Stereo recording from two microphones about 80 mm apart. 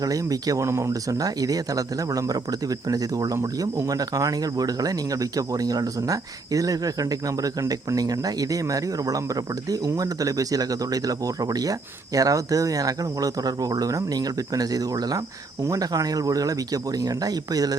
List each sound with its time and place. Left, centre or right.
0.0 s speech: right